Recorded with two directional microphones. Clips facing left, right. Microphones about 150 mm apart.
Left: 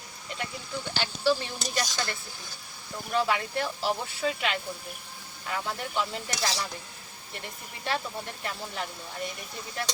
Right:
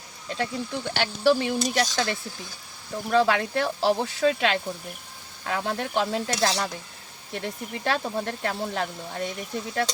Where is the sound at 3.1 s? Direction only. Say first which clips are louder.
Right 6 dB; 90° right; by 8.9 s 75° right (ahead or behind).